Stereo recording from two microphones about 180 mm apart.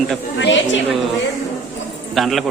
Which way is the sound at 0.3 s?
90° left.